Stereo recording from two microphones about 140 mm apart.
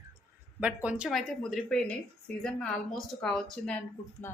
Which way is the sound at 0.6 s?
10° right (ahead or behind).